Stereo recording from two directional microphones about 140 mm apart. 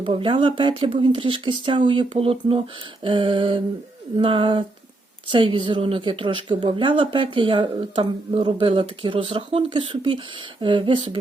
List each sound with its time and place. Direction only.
0.0 s speech: 40° right (ahead or behind)